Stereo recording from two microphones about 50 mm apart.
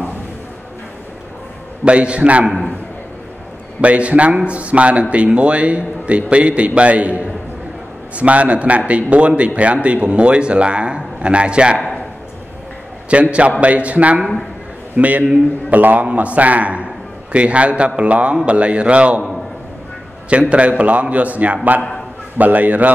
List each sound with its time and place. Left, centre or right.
1.9 s a man's voice: right
3.8 s a man's voice: right
13.1 s a man's voice: right
20.2 s a man's voice: right